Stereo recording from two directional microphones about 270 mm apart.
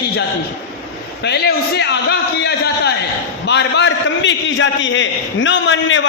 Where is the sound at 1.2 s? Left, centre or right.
Left.